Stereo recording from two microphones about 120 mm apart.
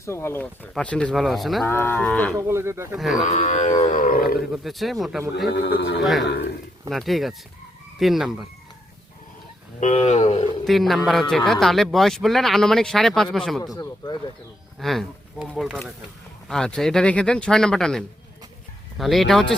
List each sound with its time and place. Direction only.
0.0 s a man's voice: 20° left (ahead or behind); by 1.6 s centre (ahead or behind)
1.6 s speech: 20° left (ahead or behind)
2.0 s a man's voice: 5° left (ahead or behind)
2.3 s speech: 25° right (ahead or behind)
2.9 s a man's voice: centre (ahead or behind)
3.2 s music: 80° left
4.4 s a man's voice: centre (ahead or behind)
9.8 s speech: 70° left (ahead or behind)
10.7 s a man's voice: centre (ahead or behind)
14.8 s a man's voice: centre (ahead or behind)